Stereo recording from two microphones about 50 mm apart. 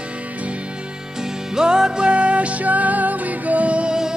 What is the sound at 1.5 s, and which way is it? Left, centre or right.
Music, centre.